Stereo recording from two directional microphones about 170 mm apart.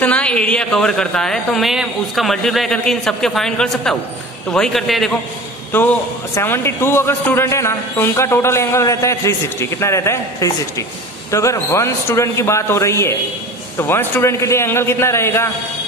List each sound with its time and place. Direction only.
0.0 s speech: 5° left (ahead or behind)
5.7 s a man's voice: 10° left (ahead or behind)